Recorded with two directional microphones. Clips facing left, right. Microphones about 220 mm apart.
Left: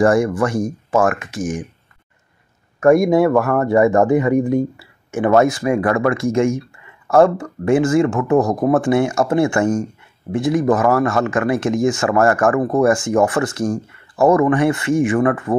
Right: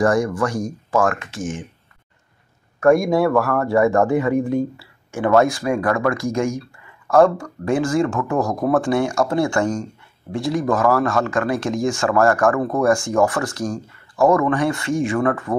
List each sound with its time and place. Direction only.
0.0 s speech: 25° left (ahead or behind)
1.3 s speech: centre (ahead or behind)
2.8 s speech: 20° left (ahead or behind)
4.5 s speech: centre (ahead or behind)
5.1 s speech: 20° left (ahead or behind)